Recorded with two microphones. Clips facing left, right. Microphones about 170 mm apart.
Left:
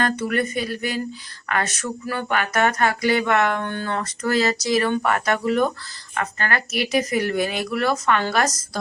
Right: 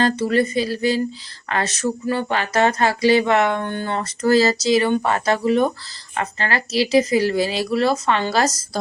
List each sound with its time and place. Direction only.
0.0 s speech: 30° right (ahead or behind)
4.2 s speech: 30° right (ahead or behind)